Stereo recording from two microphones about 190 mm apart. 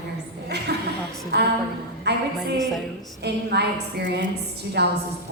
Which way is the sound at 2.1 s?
60° right (ahead or behind).